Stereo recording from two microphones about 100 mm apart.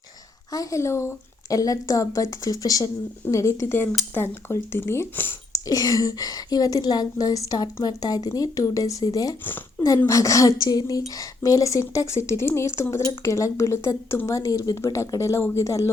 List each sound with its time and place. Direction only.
0.5 s a woman's voice: 35° left (ahead or behind)
5.5 s a woman's voice: 35° left (ahead or behind)